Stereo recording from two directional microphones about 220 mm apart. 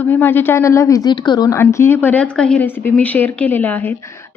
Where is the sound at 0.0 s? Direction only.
10° left (ahead or behind).